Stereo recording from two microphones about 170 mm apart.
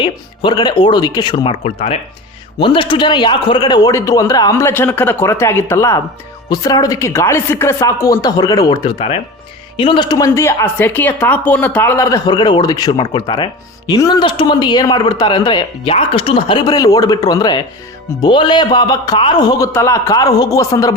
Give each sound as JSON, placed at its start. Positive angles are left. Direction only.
{"t": 0.0, "sound": "a woman's voice", "side_deg": 25}